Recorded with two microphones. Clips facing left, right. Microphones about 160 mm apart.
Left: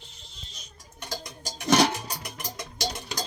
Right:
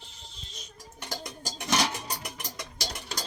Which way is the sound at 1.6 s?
50° left (ahead or behind).